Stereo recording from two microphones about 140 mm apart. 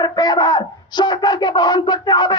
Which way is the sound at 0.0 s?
30° left (ahead or behind).